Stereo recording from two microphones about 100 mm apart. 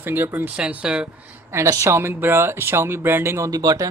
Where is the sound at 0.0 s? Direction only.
20° right (ahead or behind).